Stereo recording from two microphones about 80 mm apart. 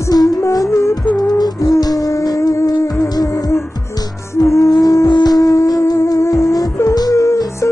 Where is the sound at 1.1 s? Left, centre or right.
Left.